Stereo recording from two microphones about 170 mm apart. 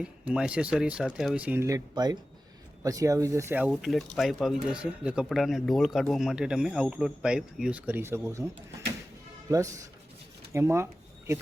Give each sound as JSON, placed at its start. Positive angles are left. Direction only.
{"t": 0.0, "sound": "speech", "side_deg": -5}
{"t": 3.7, "sound": "speech", "side_deg": 0}
{"t": 9.5, "sound": "speech", "side_deg": -20}